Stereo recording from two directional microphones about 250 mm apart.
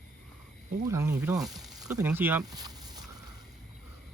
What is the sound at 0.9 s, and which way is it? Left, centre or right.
Speech, centre.